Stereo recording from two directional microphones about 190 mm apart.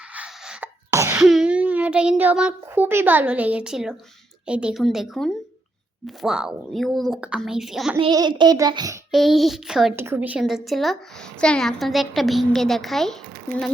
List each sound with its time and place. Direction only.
0.1 s sneeze: 5° right (ahead or behind)
1.2 s a child's voice: 5° right (ahead or behind)
7.9 s a child's voice: 25° right (ahead or behind)
9.1 s a woman's voice: centre (ahead or behind)
9.9 s a woman's voice: 10° right (ahead or behind)